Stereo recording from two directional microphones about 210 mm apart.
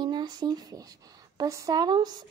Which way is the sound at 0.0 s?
20° right (ahead or behind).